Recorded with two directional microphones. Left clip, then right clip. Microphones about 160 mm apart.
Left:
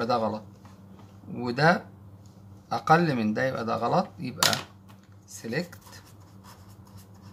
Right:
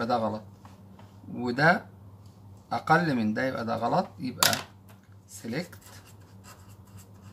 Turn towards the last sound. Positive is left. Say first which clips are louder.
# left 3 dB
turn(degrees=30)  # may be behind; listen again after turning